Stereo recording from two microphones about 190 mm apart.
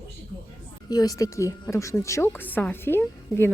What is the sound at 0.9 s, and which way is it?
A woman's voice, 20° left (ahead or behind).